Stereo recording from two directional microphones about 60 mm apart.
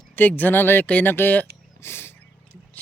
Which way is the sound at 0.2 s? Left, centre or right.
Left.